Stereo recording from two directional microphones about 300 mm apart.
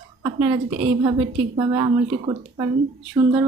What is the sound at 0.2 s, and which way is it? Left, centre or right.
A woman's voice, centre.